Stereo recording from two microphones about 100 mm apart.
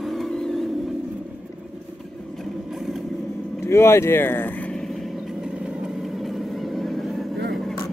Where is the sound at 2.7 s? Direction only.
5° right (ahead or behind).